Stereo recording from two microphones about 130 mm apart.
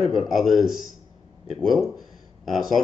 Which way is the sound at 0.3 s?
Centre (ahead or behind).